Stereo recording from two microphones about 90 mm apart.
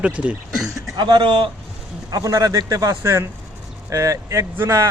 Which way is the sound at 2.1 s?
45° right (ahead or behind).